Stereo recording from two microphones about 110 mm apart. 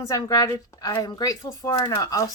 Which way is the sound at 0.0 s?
30° left (ahead or behind).